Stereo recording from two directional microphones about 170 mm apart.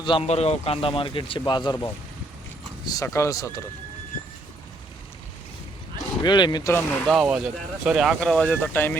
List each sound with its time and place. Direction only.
0.0 s a man's voice: 30° left (ahead or behind)
6.2 s speech: 25° left (ahead or behind)
6.7 s speech: centre (ahead or behind)